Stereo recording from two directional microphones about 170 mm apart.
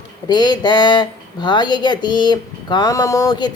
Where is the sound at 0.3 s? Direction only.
25° left (ahead or behind).